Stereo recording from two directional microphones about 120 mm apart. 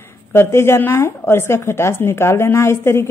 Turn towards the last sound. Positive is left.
turn(degrees=20)  # may be behind; listen again after turning